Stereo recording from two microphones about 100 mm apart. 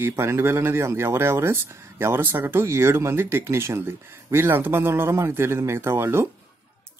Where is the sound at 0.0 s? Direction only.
25° right (ahead or behind).